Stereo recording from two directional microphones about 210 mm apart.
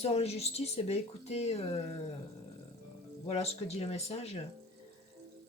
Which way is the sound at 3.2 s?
30° left (ahead or behind).